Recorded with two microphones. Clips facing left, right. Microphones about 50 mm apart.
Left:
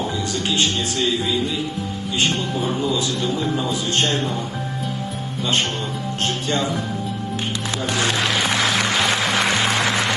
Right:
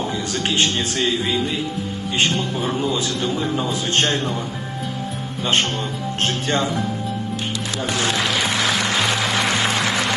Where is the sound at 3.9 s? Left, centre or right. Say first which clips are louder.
Right 2 dB; right.